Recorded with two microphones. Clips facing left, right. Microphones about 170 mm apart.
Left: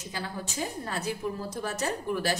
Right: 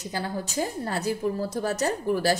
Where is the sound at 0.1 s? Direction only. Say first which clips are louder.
Right 6 dB; 40° right (ahead or behind).